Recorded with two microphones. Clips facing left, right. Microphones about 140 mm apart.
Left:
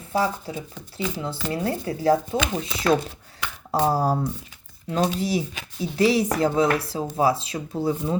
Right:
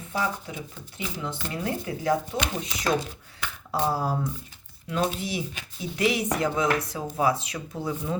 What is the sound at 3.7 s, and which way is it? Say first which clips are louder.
Speech: left 5 dB; 40° left (ahead or behind).